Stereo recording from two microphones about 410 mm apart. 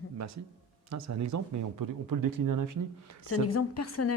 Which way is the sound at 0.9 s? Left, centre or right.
Right.